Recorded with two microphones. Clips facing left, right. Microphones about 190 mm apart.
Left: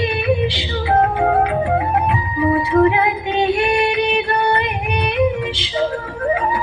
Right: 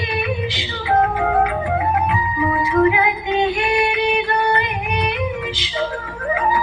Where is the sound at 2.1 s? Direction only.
30° left (ahead or behind).